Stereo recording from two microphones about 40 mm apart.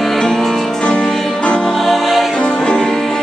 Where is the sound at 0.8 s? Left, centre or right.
Centre.